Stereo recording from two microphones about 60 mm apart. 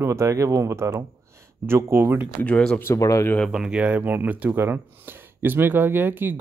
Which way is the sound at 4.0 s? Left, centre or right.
Right.